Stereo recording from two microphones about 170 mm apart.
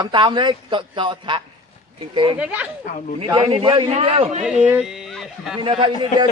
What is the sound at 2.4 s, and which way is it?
Speech, 10° right (ahead or behind).